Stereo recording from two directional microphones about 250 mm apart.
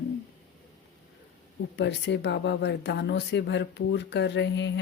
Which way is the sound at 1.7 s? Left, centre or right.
Left.